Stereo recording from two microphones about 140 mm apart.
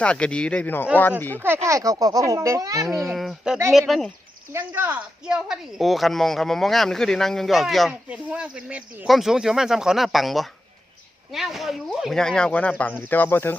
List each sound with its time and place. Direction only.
0.0 s speech: 10° left (ahead or behind)
1.6 s a child's voice: 25° right (ahead or behind)
3.1 s speech: centre (ahead or behind)
4.5 s speech: 15° right (ahead or behind); by 13.6 s 15° left (ahead or behind)